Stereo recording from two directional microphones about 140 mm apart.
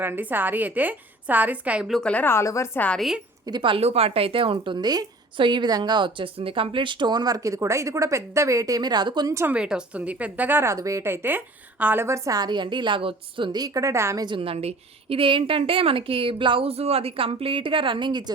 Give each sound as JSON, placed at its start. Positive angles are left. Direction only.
{"t": 0.0, "sound": "a woman's voice", "side_deg": -15}
{"t": 3.4, "sound": "speech", "side_deg": -35}
{"t": 9.3, "sound": "a woman's voice", "side_deg": -20}
{"t": 9.6, "sound": "a woman's voice", "side_deg": -5}
{"t": 14.3, "sound": "speech", "side_deg": -40}